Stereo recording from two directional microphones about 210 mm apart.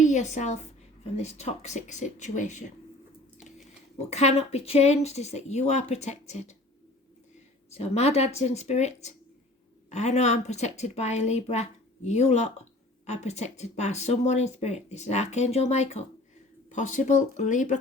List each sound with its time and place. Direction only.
0.0 s a woman's voice: 35° left (ahead or behind)
4.1 s speech: 30° left (ahead or behind)
7.7 s speech: 30° left (ahead or behind)